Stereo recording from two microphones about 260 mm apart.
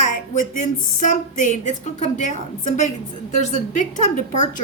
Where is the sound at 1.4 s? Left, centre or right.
Left.